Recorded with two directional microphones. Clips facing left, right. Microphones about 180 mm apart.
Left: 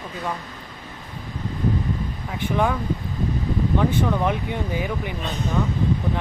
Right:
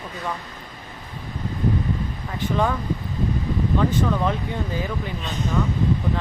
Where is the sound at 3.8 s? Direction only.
15° left (ahead or behind).